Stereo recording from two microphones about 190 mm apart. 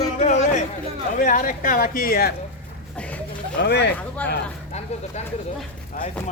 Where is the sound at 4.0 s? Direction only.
10° left (ahead or behind).